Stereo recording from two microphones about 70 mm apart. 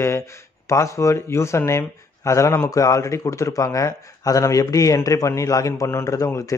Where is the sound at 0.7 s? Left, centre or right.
Left.